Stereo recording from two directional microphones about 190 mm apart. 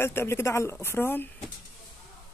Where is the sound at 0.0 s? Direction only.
15° left (ahead or behind).